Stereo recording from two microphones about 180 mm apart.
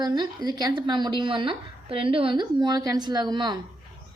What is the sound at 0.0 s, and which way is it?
A woman's voice, 25° right (ahead or behind).